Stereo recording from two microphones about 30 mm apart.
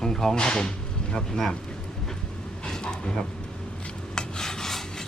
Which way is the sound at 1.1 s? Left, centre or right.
Centre.